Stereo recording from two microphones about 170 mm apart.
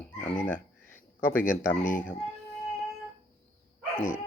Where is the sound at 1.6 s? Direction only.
50° left (ahead or behind).